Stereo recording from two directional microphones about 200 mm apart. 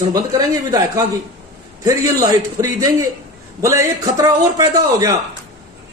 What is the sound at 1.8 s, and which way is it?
A man's voice, 15° right (ahead or behind).